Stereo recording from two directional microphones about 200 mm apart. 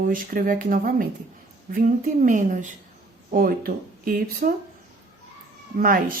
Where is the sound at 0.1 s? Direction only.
45° right (ahead or behind).